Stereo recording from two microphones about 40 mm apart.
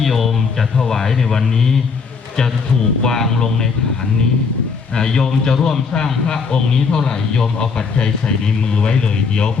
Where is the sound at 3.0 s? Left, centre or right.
Centre.